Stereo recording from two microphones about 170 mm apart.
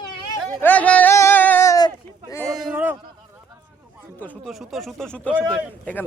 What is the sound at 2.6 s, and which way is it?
Speech, 10° right (ahead or behind).